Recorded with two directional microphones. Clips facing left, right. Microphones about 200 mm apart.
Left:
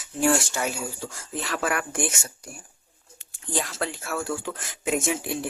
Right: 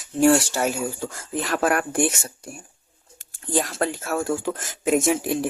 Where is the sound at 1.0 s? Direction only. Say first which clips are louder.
Right 5 dB; 50° right (ahead or behind); by 2.3 s 35° right (ahead or behind).